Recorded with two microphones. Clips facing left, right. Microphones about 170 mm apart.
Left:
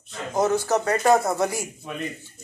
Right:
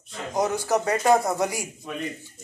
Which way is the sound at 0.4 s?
15° right (ahead or behind).